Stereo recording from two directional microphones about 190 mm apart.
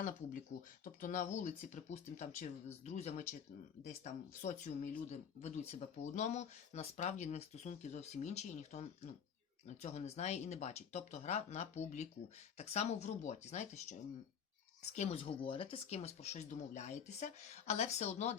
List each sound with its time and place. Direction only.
0.9 s speech: 45° left (ahead or behind)